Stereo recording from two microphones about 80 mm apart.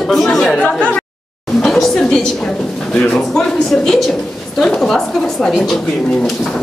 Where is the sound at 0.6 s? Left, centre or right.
Centre.